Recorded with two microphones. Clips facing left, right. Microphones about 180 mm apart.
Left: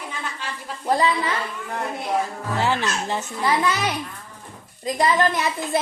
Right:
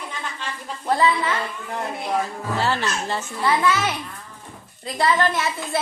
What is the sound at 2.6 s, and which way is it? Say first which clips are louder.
A child's voice: left 1 dB; 15° left (ahead or behind).